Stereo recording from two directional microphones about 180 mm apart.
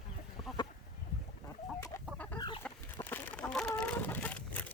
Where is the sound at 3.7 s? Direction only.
5° left (ahead or behind).